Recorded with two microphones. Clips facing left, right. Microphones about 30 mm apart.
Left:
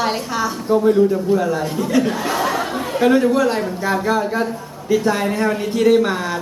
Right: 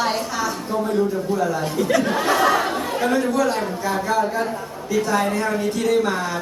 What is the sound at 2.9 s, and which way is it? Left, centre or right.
A man's voice, left.